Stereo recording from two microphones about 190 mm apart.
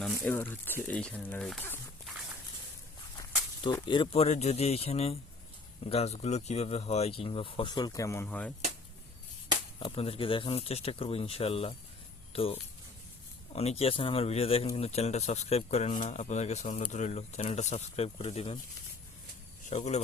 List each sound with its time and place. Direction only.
0.0 s speech: 5° left (ahead or behind)
3.6 s speech: 25° left (ahead or behind); by 8.5 s 10° left (ahead or behind)
9.8 s speech: 30° left (ahead or behind)
19.7 s speech: 35° left (ahead or behind)